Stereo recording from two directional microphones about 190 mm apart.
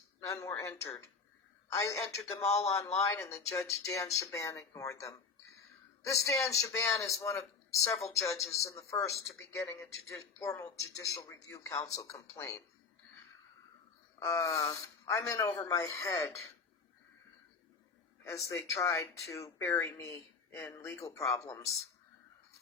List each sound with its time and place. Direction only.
0.3 s speech: 15° left (ahead or behind)
14.2 s speech: 15° left (ahead or behind)
18.2 s speech: 15° left (ahead or behind)